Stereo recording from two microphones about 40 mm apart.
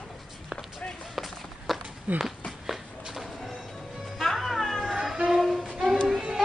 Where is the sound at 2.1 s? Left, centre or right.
Right.